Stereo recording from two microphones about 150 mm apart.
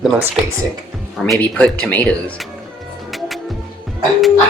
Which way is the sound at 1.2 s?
10° left (ahead or behind).